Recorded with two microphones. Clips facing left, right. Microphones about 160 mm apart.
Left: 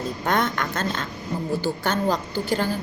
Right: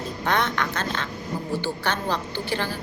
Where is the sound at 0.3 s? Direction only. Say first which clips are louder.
Even; 45° left (ahead or behind).